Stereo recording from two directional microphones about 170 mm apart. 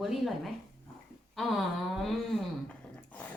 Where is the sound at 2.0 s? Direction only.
5° left (ahead or behind).